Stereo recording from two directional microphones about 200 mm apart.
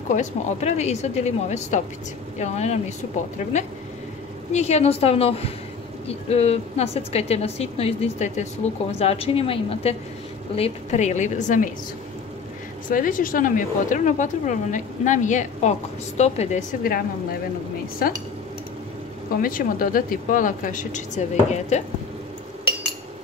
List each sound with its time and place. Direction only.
0.1 s speech: 35° left (ahead or behind)
4.5 s a woman's voice: 35° left (ahead or behind)
12.8 s speech: 45° left (ahead or behind)
18.0 s dishes: 50° left (ahead or behind)
19.4 s speech: 45° left (ahead or behind)